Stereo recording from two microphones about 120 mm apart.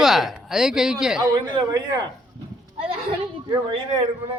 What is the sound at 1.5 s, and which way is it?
Speech, 35° right (ahead or behind).